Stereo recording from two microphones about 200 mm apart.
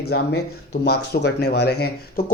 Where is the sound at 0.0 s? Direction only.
55° left (ahead or behind).